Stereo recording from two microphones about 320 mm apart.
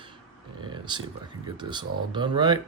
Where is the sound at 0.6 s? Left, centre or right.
Centre.